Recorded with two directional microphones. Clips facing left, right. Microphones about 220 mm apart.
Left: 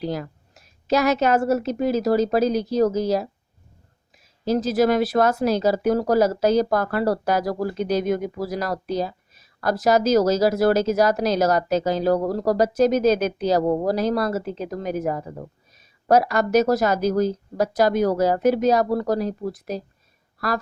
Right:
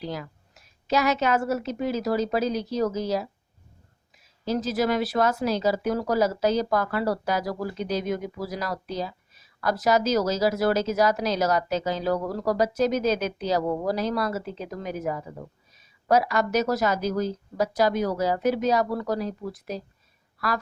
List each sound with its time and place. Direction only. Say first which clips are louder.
0.0 s speech: left 6 dB; 45° left (ahead or behind)
4.4 s speech: left 5 dB; 45° left (ahead or behind)